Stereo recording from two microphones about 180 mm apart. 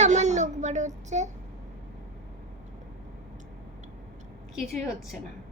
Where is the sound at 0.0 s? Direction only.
40° right (ahead or behind).